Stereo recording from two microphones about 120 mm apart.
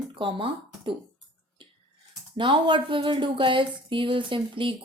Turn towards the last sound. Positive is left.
turn(degrees=-45)  # may be behind; listen again after turning